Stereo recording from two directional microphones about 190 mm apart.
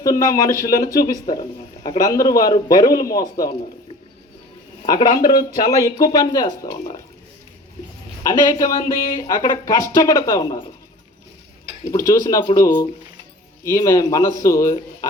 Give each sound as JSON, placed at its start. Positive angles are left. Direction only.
{"t": 0.0, "sound": "speech", "side_deg": 15}
{"t": 4.9, "sound": "speech", "side_deg": 25}
{"t": 8.2, "sound": "speech", "side_deg": 15}
{"t": 11.9, "sound": "speech", "side_deg": 15}